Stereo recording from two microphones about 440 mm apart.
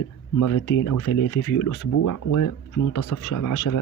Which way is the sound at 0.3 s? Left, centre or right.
Left.